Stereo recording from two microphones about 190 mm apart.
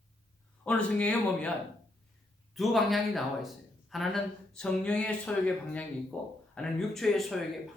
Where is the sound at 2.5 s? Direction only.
Centre (ahead or behind).